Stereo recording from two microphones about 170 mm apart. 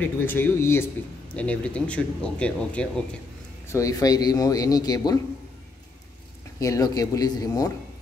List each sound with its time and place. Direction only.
0.0 s speech: 10° left (ahead or behind)
3.6 s a man's voice: 20° left (ahead or behind)
6.6 s a man's voice: 20° left (ahead or behind)